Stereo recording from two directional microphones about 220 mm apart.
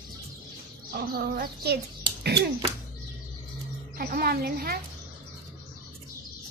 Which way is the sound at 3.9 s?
45° right (ahead or behind).